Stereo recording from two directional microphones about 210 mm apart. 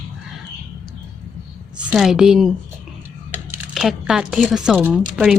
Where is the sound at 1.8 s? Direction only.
5° right (ahead or behind).